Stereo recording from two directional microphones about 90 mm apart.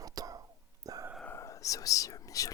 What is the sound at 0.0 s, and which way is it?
Whispering, 45° right (ahead or behind).